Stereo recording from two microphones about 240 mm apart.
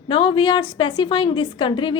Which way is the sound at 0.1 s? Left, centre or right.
Left.